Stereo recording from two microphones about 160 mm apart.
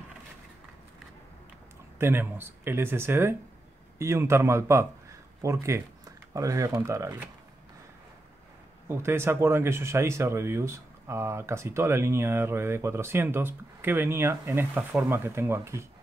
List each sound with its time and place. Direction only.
2.0 s speech: 15° right (ahead or behind)
8.8 s speech: 15° right (ahead or behind)